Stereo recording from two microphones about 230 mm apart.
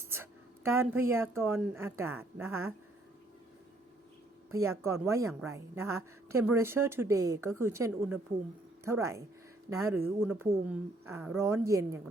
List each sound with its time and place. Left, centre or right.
0.1 s a sound: centre
1.4 s a woman's voice: centre
4.5 s a woman's voice: centre